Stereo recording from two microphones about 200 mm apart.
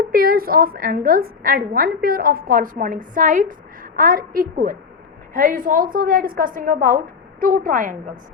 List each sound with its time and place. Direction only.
0.0 s a woman's voice: 45° right (ahead or behind)